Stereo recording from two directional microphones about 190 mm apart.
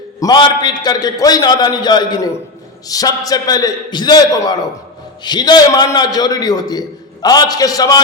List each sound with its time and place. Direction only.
0.2 s a man's voice: 20° left (ahead or behind)